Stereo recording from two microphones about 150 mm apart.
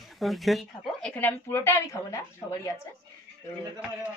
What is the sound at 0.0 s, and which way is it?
Speech, centre (ahead or behind).